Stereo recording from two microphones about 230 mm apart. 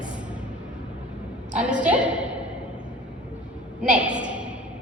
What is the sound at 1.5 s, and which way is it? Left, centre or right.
Speech, centre.